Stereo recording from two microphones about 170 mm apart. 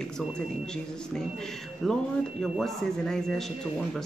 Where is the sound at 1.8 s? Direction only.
Centre (ahead or behind).